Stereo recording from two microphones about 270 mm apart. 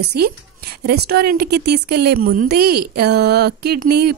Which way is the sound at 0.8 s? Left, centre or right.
Right.